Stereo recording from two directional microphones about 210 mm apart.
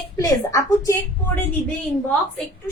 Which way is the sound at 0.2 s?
15° left (ahead or behind).